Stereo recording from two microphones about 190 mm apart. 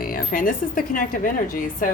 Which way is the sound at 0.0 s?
50° left (ahead or behind).